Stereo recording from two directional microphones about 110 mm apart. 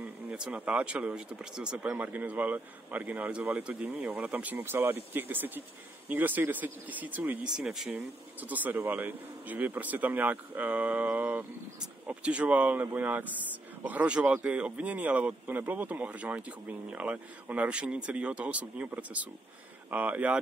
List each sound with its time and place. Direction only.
0.0 s speech: 10° right (ahead or behind)
7.9 s speech: 15° right (ahead or behind)